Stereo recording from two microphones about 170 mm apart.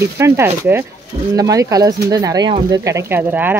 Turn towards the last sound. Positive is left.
turn(degrees=-10)  # may be behind; listen again after turning